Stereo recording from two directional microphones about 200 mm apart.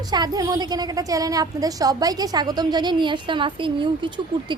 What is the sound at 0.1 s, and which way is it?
Speech, 20° right (ahead or behind).